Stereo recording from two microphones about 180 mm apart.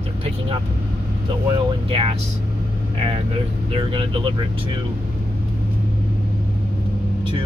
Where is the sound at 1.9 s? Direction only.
30° right (ahead or behind).